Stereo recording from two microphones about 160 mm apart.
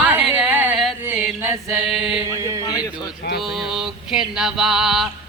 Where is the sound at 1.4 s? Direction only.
15° right (ahead or behind).